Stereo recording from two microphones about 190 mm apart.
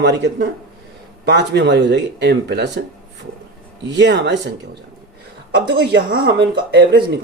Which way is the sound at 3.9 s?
65° right (ahead or behind).